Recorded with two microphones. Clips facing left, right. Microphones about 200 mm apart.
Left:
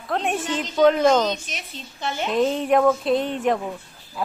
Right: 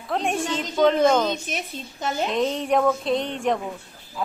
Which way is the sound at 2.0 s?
40° right (ahead or behind).